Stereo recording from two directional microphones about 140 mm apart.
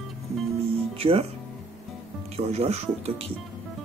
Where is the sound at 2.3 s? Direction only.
50° right (ahead or behind).